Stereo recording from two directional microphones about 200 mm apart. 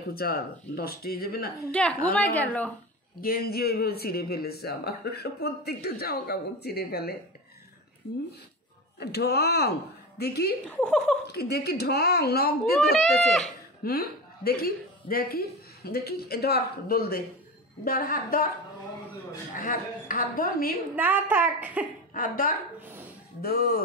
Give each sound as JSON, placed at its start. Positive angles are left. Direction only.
{"t": 0.1, "sound": "speech", "side_deg": 50}
{"t": 1.6, "sound": "a woman's voice", "side_deg": 5}
{"t": 3.2, "sound": "speech", "side_deg": 50}
{"t": 9.0, "sound": "speech", "side_deg": 55}
{"t": 10.7, "sound": "speech", "side_deg": 5}
{"t": 11.3, "sound": "speech", "side_deg": 55}
{"t": 13.1, "sound": "speech", "side_deg": 0}
{"t": 13.8, "sound": "a woman's voice", "side_deg": 50}
{"t": 19.5, "sound": "speech", "side_deg": 45}
{"t": 20.9, "sound": "a woman's voice", "side_deg": -10}
{"t": 22.1, "sound": "speech", "side_deg": 45}